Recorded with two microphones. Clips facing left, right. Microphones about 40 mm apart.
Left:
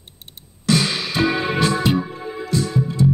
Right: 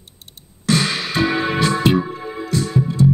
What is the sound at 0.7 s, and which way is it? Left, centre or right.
Music, right.